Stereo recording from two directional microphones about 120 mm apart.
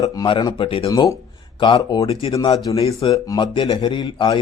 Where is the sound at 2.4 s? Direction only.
35° left (ahead or behind).